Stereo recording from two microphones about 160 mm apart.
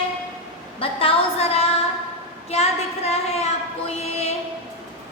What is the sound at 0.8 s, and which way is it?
A woman's voice, 35° left (ahead or behind).